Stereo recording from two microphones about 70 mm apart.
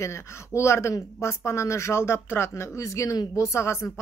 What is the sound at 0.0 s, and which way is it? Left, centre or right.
Speech, left.